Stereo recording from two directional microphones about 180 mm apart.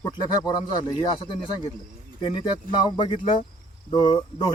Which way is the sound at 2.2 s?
25° left (ahead or behind).